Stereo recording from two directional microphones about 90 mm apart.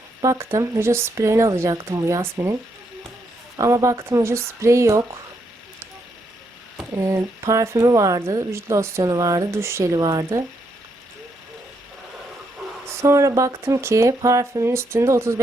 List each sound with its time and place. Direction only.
0.2 s speech: 35° right (ahead or behind)
3.6 s speech: 35° right (ahead or behind)
6.9 s speech: 35° right (ahead or behind)
10.0 s speech: 50° right (ahead or behind)
12.8 s speech: 30° right (ahead or behind)